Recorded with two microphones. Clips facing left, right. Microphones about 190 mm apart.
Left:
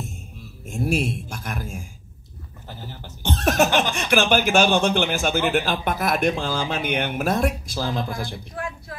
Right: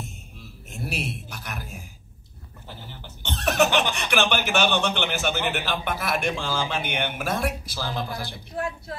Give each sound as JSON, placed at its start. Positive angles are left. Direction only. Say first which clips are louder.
{"t": 0.7, "sound": "speech", "louder": "left 8 dB", "side_deg": 45}
{"t": 2.9, "sound": "speech", "louder": "left 8 dB", "side_deg": 45}